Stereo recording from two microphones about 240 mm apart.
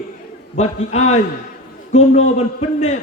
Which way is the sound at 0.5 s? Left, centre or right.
Left.